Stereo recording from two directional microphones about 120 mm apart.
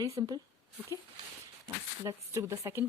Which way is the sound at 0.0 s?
30° right (ahead or behind).